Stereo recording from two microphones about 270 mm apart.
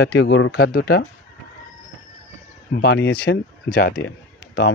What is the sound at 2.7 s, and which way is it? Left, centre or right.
Speech, left.